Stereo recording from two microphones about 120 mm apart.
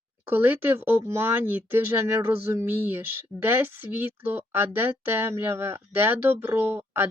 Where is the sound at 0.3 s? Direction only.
15° right (ahead or behind).